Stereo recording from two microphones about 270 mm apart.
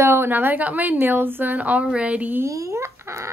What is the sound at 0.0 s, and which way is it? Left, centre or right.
A woman's voice, centre.